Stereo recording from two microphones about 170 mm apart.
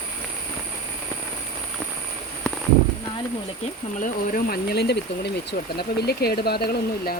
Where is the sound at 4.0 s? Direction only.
55° left (ahead or behind).